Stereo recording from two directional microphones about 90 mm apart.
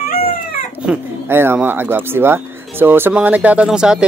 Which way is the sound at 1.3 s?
25° right (ahead or behind).